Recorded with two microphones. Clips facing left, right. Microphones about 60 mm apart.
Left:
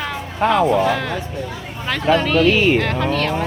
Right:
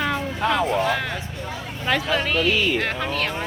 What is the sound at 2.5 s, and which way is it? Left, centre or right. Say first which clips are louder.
Speech: left 6 dB; left.